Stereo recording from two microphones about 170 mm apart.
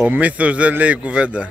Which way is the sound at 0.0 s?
10° right (ahead or behind).